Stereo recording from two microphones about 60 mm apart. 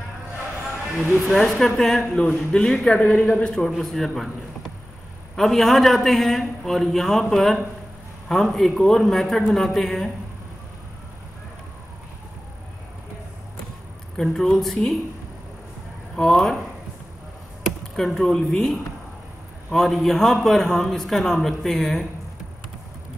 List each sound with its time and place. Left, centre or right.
1.2 s a man's voice: centre
3.0 s speech: left
3.7 s a man's voice: centre
14.1 s a woman's voice: centre
16.2 s a woman's voice: centre
17.9 s a man's voice: centre